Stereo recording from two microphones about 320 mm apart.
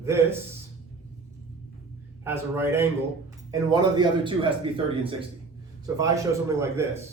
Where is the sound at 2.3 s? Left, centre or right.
Centre.